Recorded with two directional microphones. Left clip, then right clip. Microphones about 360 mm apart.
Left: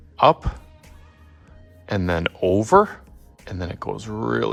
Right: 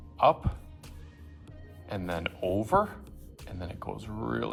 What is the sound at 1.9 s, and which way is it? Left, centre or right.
Speech, left.